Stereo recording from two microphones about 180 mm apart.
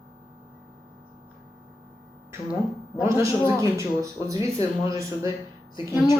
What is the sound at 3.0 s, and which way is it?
Speech, 15° right (ahead or behind).